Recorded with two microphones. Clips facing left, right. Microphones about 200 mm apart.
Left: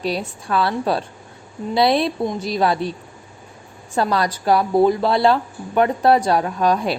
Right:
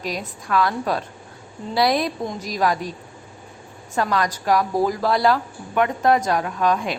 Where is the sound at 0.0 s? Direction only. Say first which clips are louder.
Left 5 dB; 30° left (ahead or behind).